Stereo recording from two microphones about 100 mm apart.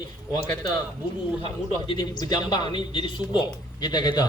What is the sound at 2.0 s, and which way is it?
A man's voice, 45° left (ahead or behind).